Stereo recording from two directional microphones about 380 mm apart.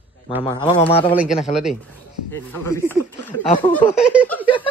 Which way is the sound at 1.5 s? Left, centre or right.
Centre.